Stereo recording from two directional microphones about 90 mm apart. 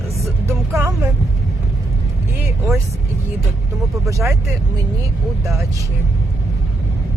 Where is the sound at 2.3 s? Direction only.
25° right (ahead or behind).